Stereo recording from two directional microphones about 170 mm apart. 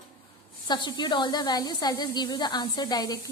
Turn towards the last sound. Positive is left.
turn(degrees=25)  # may be behind; listen again after turning